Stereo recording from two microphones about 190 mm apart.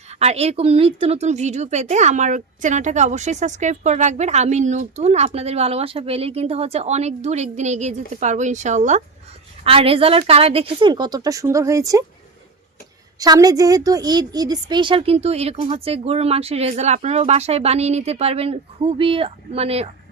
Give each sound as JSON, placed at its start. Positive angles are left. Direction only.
{"t": 0.1, "sound": "a woman's voice", "side_deg": -35}
{"t": 13.1, "sound": "speech", "side_deg": -20}